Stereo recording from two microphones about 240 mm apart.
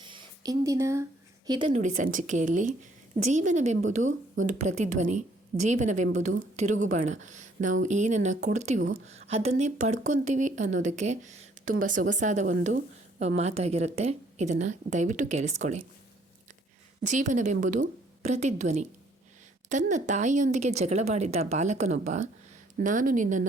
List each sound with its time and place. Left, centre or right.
0.1 s a sound: centre
1.5 s a woman's voice: right
17.0 s a woman's voice: right